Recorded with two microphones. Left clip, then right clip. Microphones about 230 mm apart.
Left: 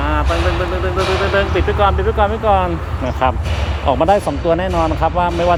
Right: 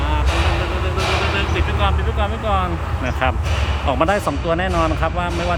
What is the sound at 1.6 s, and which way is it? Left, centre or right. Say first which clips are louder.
Speech: left 6 dB; centre.